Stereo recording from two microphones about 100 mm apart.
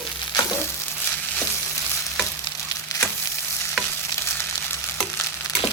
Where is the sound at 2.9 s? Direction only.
40° left (ahead or behind).